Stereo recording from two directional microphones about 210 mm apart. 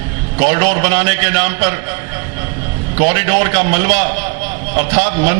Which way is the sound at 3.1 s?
15° right (ahead or behind).